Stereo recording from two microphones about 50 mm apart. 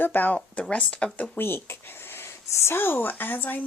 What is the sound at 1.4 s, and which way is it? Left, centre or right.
A woman's voice, left.